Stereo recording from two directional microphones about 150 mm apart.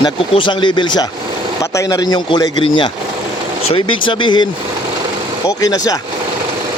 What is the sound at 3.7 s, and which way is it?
Speech, 35° left (ahead or behind).